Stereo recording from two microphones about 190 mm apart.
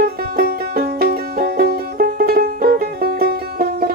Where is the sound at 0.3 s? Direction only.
55° right (ahead or behind).